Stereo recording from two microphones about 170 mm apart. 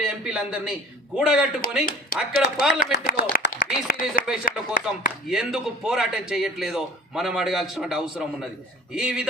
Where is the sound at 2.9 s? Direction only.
70° left (ahead or behind).